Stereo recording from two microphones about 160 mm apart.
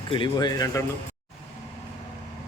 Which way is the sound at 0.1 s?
30° left (ahead or behind).